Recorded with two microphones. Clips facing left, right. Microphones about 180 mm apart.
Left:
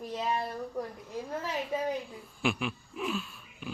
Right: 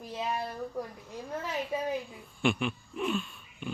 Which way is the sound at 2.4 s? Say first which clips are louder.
Right 2 dB; centre (ahead or behind).